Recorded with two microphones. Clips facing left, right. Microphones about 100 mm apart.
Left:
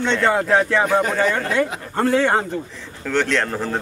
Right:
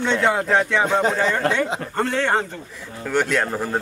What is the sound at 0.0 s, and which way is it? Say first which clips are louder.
A man's voice: left 1 dB; 5° right (ahead or behind).